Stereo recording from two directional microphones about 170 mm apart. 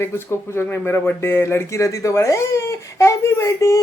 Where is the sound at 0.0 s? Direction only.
15° left (ahead or behind).